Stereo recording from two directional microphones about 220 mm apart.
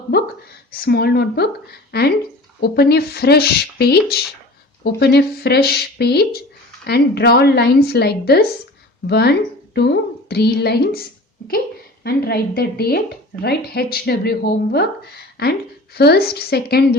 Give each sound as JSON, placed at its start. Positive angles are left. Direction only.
{"t": 0.7, "sound": "speech", "side_deg": 45}
{"t": 12.0, "sound": "speech", "side_deg": 45}